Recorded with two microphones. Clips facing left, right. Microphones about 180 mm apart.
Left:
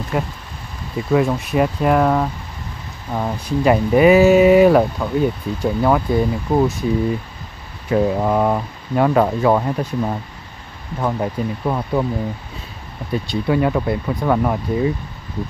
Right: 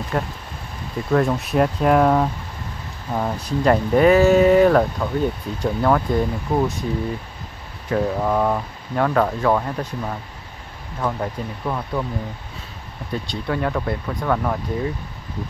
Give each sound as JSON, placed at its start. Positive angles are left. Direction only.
{"t": 0.1, "sound": "speech", "side_deg": 5}
{"t": 7.9, "sound": "speech", "side_deg": 15}
{"t": 13.1, "sound": "speech", "side_deg": 10}